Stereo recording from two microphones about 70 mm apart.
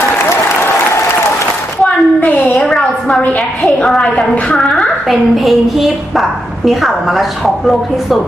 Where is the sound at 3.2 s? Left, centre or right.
Centre.